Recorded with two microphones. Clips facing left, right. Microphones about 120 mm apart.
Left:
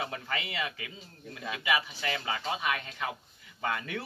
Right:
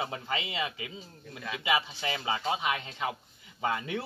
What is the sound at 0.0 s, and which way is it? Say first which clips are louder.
Speech: right 2 dB; 25° right (ahead or behind).